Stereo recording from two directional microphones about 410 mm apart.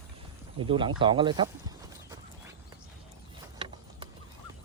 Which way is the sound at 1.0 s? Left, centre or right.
Centre.